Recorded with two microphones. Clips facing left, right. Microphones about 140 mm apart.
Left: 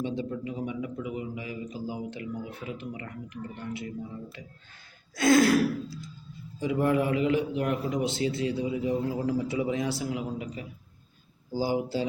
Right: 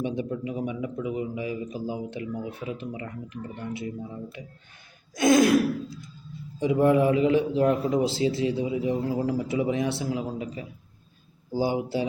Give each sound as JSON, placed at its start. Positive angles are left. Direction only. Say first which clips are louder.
{"t": 0.0, "sound": "a man's voice", "louder": "right 3 dB", "side_deg": -20}